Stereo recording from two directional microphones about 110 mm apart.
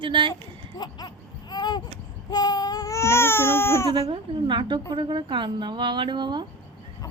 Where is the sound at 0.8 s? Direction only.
40° left (ahead or behind).